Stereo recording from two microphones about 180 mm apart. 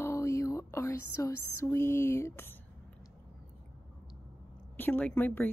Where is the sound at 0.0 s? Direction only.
15° left (ahead or behind).